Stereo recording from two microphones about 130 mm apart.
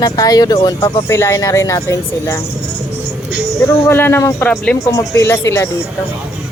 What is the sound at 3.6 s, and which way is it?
Speech, 15° left (ahead or behind).